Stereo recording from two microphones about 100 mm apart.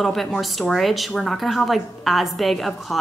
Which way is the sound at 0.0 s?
Centre (ahead or behind).